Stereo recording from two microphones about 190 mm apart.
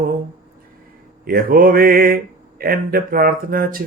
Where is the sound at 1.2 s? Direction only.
50° right (ahead or behind).